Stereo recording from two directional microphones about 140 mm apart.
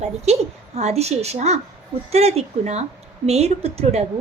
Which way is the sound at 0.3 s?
50° right (ahead or behind).